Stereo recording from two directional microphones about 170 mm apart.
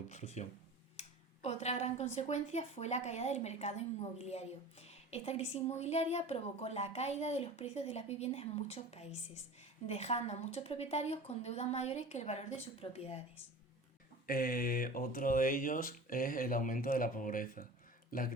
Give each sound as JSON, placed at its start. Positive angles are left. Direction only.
{"t": 0.1, "sound": "a woman's voice", "side_deg": 40}
{"t": 14.3, "sound": "speech", "side_deg": 55}